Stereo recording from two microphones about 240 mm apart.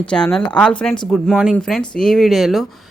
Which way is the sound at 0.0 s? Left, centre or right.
Centre.